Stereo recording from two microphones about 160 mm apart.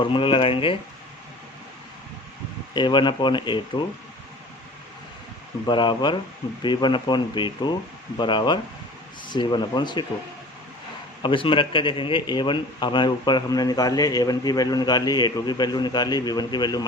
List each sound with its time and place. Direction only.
0.0 s speech: 30° left (ahead or behind)
2.7 s a man's voice: 30° left (ahead or behind)
5.6 s a man's voice: 30° left (ahead or behind)
11.2 s a man's voice: 30° left (ahead or behind)